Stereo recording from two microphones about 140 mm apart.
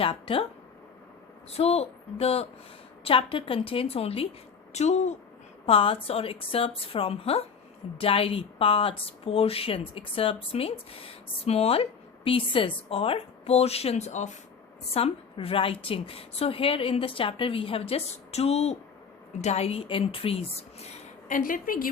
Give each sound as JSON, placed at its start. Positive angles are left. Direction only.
{"t": 0.0, "sound": "a woman's voice", "side_deg": 40}
{"t": 1.5, "sound": "a woman's voice", "side_deg": 45}
{"t": 5.6, "sound": "speech", "side_deg": 40}
{"t": 14.9, "sound": "a woman's voice", "side_deg": 45}
{"t": 21.2, "sound": "a woman's voice", "side_deg": 70}